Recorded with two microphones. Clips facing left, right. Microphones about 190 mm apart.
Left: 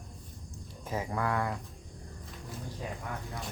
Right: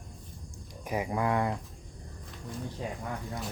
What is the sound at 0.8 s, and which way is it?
Speech, 15° right (ahead or behind).